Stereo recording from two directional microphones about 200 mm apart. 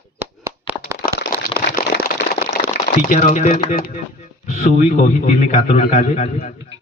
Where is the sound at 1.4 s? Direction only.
50° left (ahead or behind).